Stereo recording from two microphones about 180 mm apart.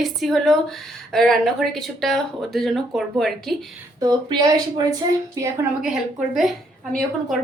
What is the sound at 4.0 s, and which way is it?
A woman's voice, 25° right (ahead or behind).